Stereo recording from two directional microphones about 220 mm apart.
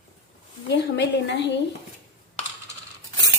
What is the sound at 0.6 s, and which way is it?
Speech, 55° left (ahead or behind).